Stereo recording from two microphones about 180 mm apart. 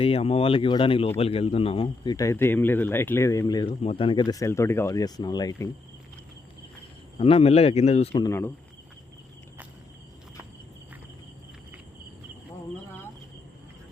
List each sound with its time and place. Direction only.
0.0 s a man's voice: 35° left (ahead or behind)
7.2 s speech: 30° left (ahead or behind)
8.2 s speech: 15° left (ahead or behind)